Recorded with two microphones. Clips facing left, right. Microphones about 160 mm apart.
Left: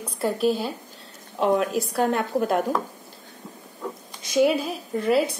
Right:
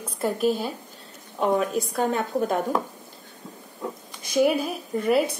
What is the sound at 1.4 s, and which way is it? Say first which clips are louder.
A woman's voice: left 1 dB; centre (ahead or behind).